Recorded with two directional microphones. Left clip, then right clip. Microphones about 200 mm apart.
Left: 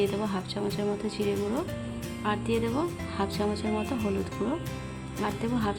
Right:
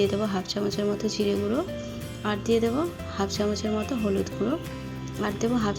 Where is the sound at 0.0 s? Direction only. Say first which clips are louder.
Right 3 dB; 15° right (ahead or behind).